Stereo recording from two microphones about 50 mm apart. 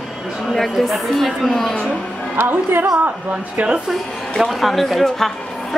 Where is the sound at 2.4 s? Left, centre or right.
Right.